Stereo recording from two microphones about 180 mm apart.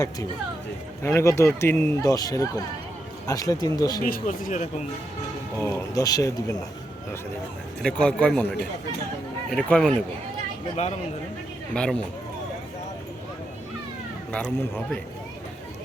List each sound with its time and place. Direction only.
1.0 s speech: 15° left (ahead or behind)
4.0 s speech: 50° left (ahead or behind)
5.5 s speech: 15° left (ahead or behind)
7.8 s a man's voice: 5° left (ahead or behind)
11.7 s a man's voice: 5° left (ahead or behind)
14.3 s speech: 5° left (ahead or behind)